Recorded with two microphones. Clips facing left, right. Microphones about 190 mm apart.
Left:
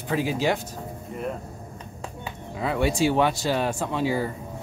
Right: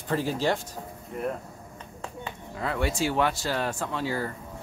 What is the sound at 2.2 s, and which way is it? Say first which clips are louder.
Speech: left 4 dB; 15° left (ahead or behind).